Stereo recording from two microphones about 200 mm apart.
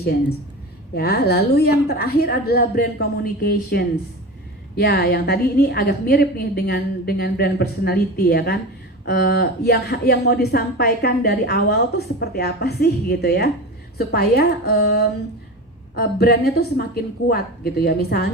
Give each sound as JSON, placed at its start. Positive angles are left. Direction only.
{"t": 0.9, "sound": "speech", "side_deg": 50}